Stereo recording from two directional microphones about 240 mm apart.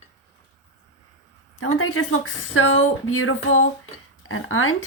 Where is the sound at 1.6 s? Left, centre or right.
Left.